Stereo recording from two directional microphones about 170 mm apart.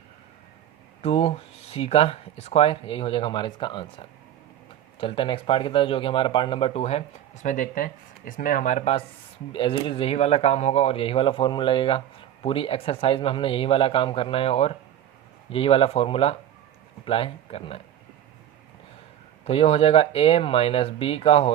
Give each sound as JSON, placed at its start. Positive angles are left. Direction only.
{"t": 1.0, "sound": "speech", "side_deg": 35}
{"t": 7.4, "sound": "speech", "side_deg": 50}
{"t": 19.5, "sound": "speech", "side_deg": 35}